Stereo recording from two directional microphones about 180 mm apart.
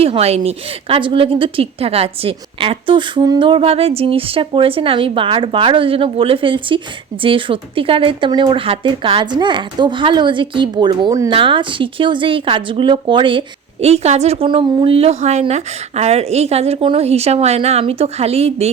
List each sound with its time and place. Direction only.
0.0 s a woman's voice: 35° right (ahead or behind)